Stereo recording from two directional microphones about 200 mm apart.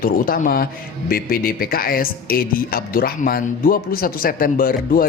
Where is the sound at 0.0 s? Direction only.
45° left (ahead or behind).